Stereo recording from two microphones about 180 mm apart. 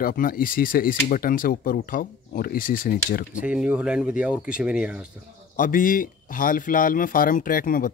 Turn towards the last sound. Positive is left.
turn(degrees=50)  # may be behind; listen again after turning